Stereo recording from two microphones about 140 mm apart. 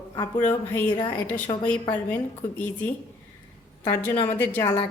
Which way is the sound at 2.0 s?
15° left (ahead or behind).